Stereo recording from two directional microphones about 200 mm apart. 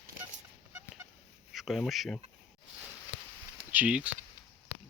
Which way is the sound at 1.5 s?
Centre (ahead or behind).